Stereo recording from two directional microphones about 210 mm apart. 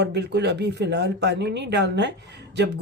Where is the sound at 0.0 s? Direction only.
55° right (ahead or behind).